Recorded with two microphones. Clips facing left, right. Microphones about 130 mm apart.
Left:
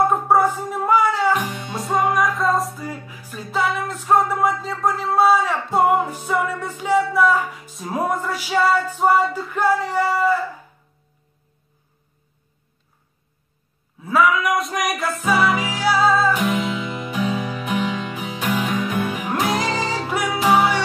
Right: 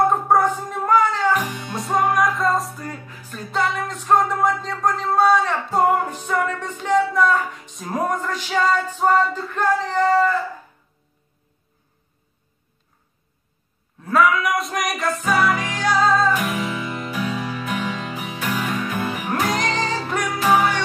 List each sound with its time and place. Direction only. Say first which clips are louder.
0.1 s music: left 1 dB; 5° left (ahead or behind)
1.7 s music: even; centre (ahead or behind)
13.9 s music: even; centre (ahead or behind)
16.4 s music: left 3 dB; 20° left (ahead or behind)